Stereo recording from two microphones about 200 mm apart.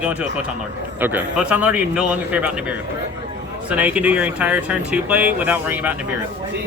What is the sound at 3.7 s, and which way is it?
Speech, 5° right (ahead or behind).